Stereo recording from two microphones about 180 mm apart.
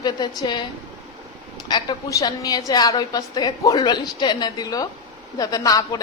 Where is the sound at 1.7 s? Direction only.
25° left (ahead or behind).